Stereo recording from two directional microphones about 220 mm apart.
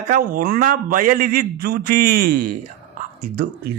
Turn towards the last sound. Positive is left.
turn(degrees=-40)  # may be behind; listen again after turning